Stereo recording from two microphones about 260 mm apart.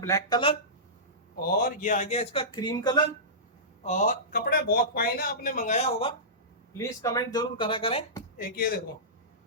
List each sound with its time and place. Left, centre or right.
0.0 s speech: centre
1.4 s speech: left; by 3.0 s centre
3.8 s speech: left
8.4 s speech: left